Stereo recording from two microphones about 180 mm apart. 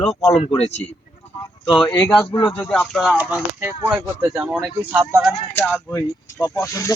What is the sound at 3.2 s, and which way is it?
Speech, 10° right (ahead or behind).